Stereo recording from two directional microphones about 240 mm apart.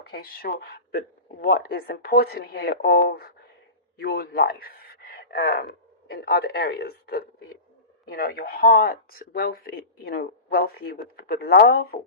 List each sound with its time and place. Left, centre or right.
0.0 s speech: left